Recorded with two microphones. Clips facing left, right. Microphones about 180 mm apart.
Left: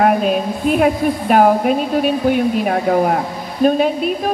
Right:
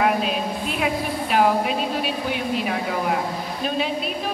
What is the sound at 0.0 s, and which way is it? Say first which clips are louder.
A woman's voice: left 7 dB; 50° left (ahead or behind).